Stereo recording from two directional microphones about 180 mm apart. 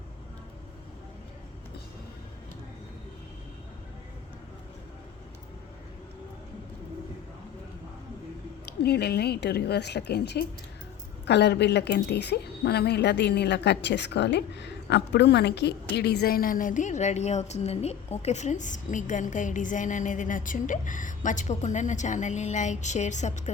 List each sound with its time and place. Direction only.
8.6 s a woman's voice: 65° left (ahead or behind); by 23.4 s 40° left (ahead or behind)